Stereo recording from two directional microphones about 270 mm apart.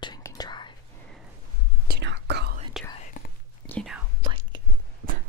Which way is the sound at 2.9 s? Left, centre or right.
Left.